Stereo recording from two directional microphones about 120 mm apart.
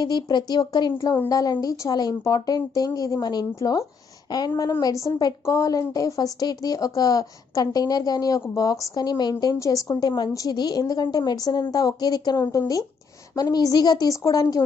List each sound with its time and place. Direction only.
0.0 s a woman's voice: 35° left (ahead or behind)